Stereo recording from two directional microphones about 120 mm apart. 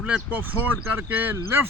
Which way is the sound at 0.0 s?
15° right (ahead or behind).